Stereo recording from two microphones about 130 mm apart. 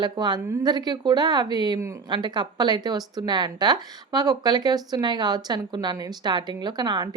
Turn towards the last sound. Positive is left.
turn(degrees=-35)  # may be behind; listen again after turning